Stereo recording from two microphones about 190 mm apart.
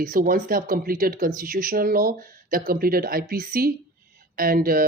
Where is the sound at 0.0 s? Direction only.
50° right (ahead or behind).